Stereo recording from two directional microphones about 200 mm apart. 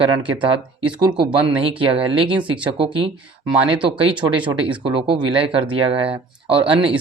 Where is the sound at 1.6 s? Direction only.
25° right (ahead or behind).